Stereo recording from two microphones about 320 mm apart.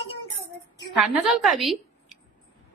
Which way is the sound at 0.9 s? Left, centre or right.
Centre.